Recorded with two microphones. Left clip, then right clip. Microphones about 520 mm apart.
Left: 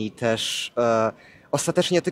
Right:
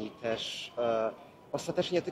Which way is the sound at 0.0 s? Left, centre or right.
Left.